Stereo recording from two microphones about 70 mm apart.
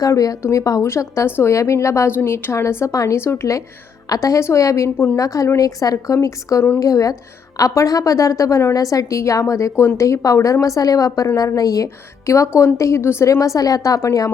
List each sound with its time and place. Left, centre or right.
0.0 s a woman's voice: left
2.9 s a woman's voice: left
3.2 s a woman's voice: left
6.2 s a woman's voice: left
13.2 s speech: left